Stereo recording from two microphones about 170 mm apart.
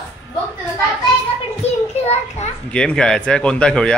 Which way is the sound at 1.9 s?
40° left (ahead or behind).